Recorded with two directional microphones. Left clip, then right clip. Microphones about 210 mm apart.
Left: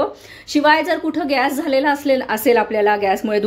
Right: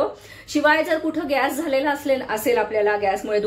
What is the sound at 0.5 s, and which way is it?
A woman's voice, 40° left (ahead or behind).